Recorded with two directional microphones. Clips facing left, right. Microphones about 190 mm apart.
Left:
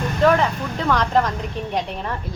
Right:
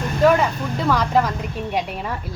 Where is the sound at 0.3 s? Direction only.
5° right (ahead or behind).